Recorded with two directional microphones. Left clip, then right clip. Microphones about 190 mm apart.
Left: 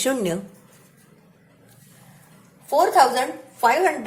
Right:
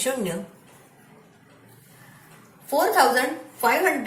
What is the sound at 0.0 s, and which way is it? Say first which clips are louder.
Speech: left 3 dB; 55° left (ahead or behind).